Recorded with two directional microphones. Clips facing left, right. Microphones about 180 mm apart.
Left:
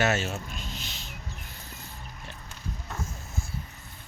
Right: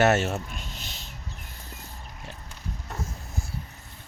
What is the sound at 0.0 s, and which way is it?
Speech, 65° right (ahead or behind).